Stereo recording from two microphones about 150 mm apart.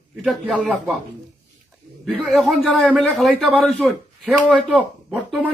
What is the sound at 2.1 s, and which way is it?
A man's voice, centre (ahead or behind).